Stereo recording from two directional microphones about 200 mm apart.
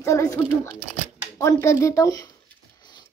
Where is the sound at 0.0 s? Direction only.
15° left (ahead or behind).